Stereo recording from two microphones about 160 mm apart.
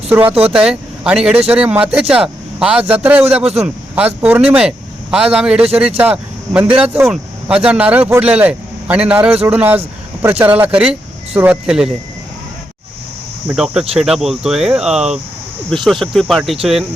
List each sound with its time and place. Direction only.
0.1 s speech: 10° right (ahead or behind)
13.5 s speech: 5° right (ahead or behind)